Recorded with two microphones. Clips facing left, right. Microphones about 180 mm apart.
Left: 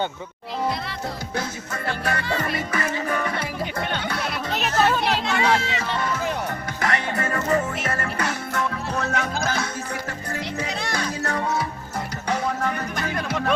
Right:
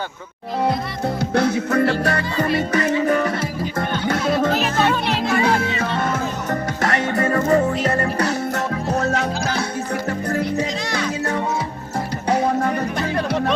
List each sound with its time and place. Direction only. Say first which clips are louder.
1.3 s music: right 11 dB; 65° right (ahead or behind)
2.4 s music: right 7 dB; 40° right (ahead or behind)
4.5 s music: right 2 dB; centre (ahead or behind)
5.4 s music: right 3 dB; 55° right (ahead or behind)
13.0 s music: right 5 dB; 30° right (ahead or behind)